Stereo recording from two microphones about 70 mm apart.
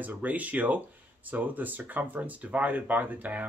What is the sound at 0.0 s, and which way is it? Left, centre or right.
Speech, right.